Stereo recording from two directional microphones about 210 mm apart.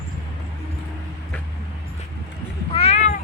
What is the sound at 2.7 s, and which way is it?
Cat, 30° left (ahead or behind).